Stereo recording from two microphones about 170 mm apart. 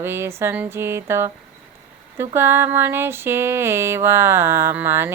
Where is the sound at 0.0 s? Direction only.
15° right (ahead or behind).